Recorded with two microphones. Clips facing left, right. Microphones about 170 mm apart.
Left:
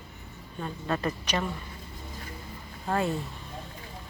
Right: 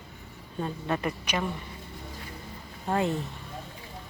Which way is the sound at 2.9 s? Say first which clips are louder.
Right 1 dB; 20° right (ahead or behind).